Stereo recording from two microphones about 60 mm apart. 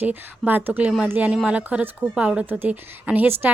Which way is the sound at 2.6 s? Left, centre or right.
Right.